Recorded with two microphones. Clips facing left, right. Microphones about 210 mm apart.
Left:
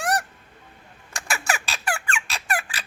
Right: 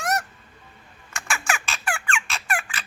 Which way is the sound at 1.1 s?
35° left (ahead or behind).